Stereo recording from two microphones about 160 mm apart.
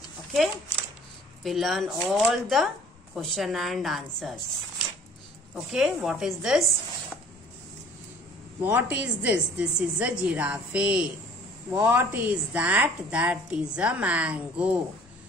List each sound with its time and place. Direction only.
0.3 s speech: centre (ahead or behind)
5.5 s speech: 5° right (ahead or behind)
8.6 s a woman's voice: 10° right (ahead or behind)